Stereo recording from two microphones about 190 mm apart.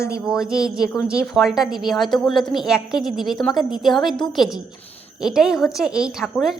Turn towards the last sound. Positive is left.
turn(degrees=0)  # may be behind; listen again after turning